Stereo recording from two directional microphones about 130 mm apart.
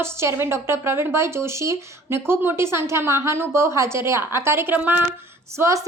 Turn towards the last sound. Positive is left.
turn(degrees=-20)  # may be behind; listen again after turning